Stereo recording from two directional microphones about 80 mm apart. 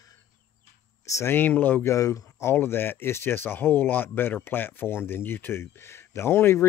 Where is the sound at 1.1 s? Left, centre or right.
Left.